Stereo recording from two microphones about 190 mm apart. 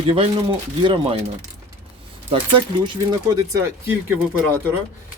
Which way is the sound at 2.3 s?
25° right (ahead or behind).